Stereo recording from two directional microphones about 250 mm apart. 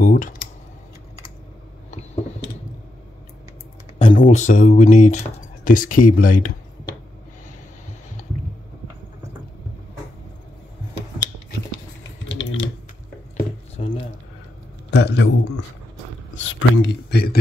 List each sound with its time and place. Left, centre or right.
0.0 s computer keyboard: left
4.0 s speech: left
12.3 s typing: left
13.7 s a sound: left
14.9 s a man's voice: left